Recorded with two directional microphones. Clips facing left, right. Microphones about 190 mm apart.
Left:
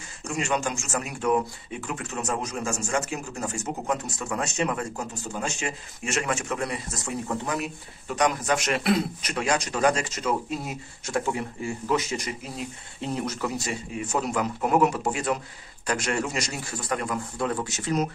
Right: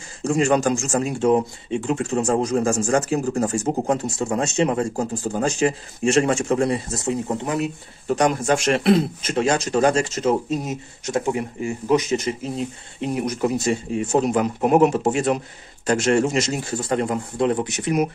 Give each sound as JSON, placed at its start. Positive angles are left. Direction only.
{"t": 0.2, "sound": "a man's voice", "side_deg": -35}
{"t": 13.0, "sound": "a man's voice", "side_deg": -15}